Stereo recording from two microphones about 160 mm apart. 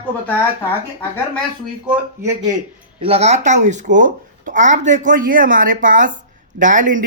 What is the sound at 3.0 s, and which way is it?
A woman's voice, 40° right (ahead or behind).